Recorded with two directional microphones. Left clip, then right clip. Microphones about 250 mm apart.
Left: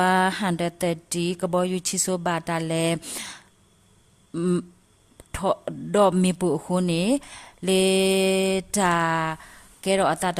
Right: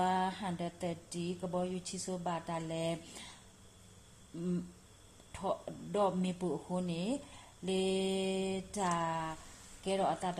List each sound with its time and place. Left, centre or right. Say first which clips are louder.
0.0 s speech: left 12 dB; left
5.3 s speech: left 13 dB; left